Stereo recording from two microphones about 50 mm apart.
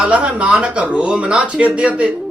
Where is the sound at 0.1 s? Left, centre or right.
Right.